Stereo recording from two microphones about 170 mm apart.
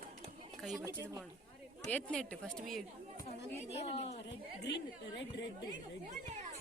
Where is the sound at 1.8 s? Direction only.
5° left (ahead or behind).